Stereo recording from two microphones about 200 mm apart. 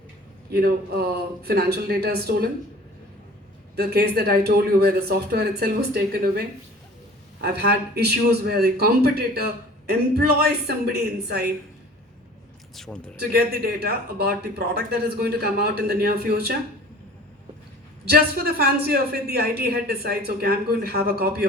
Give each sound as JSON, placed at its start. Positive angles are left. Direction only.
{"t": 0.5, "sound": "a man's voice", "side_deg": -50}
{"t": 3.8, "sound": "a man's voice", "side_deg": -55}
{"t": 7.4, "sound": "a man's voice", "side_deg": -50}
{"t": 12.7, "sound": "speech", "side_deg": 0}
{"t": 13.1, "sound": "a man's voice", "side_deg": -50}
{"t": 18.0, "sound": "a man's voice", "side_deg": -50}